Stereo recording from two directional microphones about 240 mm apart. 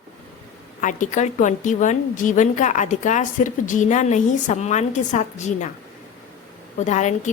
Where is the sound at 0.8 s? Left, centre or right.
Left.